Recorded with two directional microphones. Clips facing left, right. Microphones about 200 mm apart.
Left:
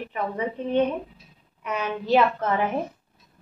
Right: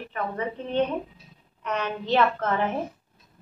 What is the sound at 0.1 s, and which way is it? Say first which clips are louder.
A woman's voice: left 1 dB; 15° left (ahead or behind).